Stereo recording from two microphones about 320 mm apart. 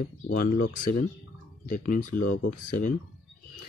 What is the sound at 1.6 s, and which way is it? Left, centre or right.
Speech, left.